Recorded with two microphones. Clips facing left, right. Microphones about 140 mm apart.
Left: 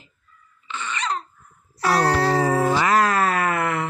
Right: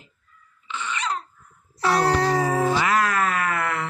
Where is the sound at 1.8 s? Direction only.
15° right (ahead or behind).